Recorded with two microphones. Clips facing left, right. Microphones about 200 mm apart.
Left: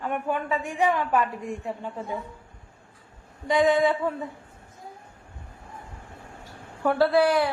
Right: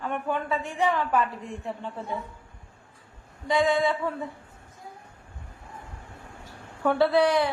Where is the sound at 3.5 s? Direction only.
20° left (ahead or behind).